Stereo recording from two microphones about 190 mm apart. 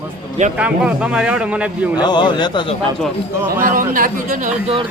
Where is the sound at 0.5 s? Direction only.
5° right (ahead or behind).